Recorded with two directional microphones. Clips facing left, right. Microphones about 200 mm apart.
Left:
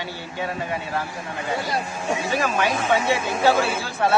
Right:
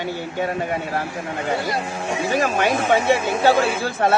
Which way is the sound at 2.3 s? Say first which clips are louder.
Right 4 dB; 50° right (ahead or behind).